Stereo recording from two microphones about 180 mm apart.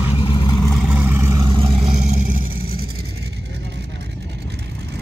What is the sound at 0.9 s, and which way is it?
Vehicle, 10° right (ahead or behind).